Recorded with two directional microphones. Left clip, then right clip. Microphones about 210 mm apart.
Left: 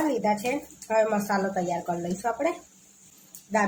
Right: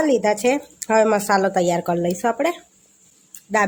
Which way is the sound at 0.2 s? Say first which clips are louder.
Right 7 dB; 55° right (ahead or behind).